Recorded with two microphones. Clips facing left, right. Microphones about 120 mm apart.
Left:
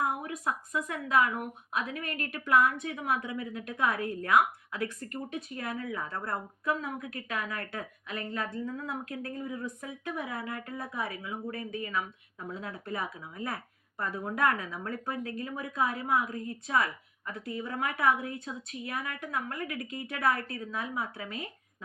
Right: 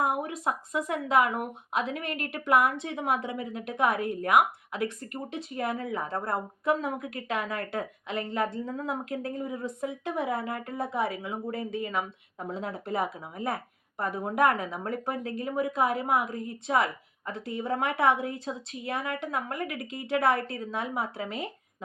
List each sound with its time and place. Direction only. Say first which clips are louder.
0.2 s speech: right 3 dB; 25° right (ahead or behind)